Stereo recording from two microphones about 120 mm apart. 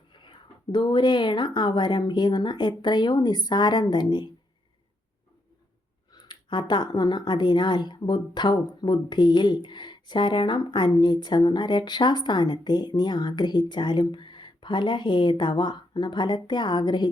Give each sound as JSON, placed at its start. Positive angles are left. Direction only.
{"t": 0.1, "sound": "speech", "side_deg": 40}
{"t": 6.1, "sound": "speech", "side_deg": 35}